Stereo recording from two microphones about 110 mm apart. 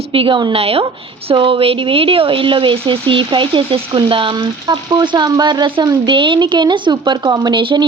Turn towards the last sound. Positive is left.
turn(degrees=-50)  # may be behind; listen again after turning